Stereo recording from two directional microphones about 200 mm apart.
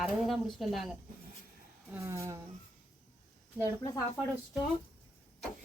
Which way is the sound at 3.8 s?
15° left (ahead or behind).